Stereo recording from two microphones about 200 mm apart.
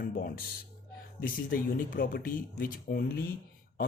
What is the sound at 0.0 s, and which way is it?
Speech, 45° left (ahead or behind).